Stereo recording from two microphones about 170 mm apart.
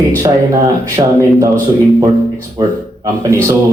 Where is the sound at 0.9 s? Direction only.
20° right (ahead or behind).